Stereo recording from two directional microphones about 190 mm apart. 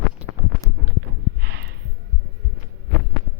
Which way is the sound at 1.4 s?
60° right (ahead or behind).